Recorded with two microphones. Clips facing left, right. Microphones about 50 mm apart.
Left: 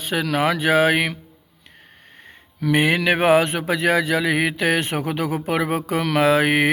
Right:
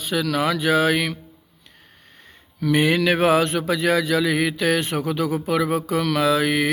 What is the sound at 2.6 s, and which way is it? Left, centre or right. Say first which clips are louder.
Mantra: even; left.